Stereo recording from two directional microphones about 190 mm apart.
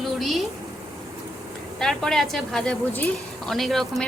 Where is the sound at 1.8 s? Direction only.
Centre (ahead or behind).